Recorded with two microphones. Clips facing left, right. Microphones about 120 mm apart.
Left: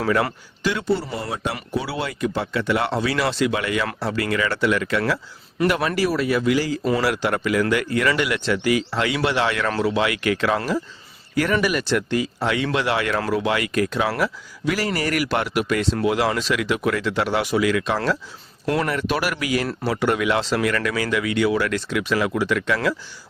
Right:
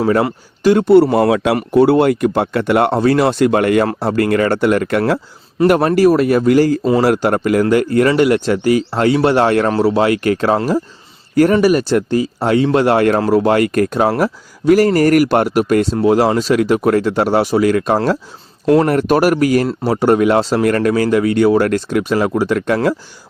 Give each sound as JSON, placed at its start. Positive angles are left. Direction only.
{"t": 0.6, "sound": "speech", "side_deg": -45}
{"t": 0.9, "sound": "speech", "side_deg": -70}
{"t": 1.5, "sound": "speech", "side_deg": -55}